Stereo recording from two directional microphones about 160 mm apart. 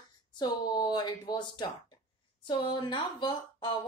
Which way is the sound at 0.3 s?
25° left (ahead or behind).